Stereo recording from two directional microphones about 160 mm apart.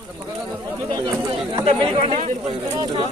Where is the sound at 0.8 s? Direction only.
25° right (ahead or behind).